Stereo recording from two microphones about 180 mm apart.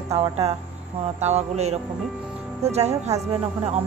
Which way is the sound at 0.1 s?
35° right (ahead or behind).